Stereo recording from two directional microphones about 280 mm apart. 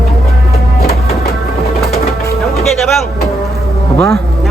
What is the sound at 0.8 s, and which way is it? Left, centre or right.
Music, left.